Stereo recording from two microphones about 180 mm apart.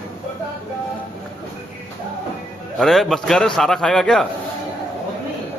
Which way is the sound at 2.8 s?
Centre (ahead or behind).